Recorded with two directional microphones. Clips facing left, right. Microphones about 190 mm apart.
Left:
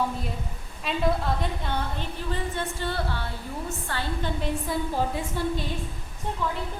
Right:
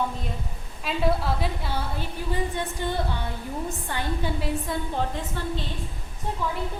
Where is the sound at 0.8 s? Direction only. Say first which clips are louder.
Right 1 dB; 5° right (ahead or behind).